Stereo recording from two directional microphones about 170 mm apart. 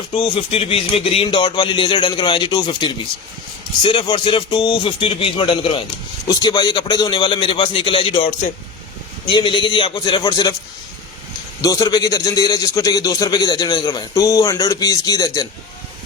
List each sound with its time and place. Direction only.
0.2 s a man's voice: 35° left (ahead or behind)
11.6 s a man's voice: 20° left (ahead or behind)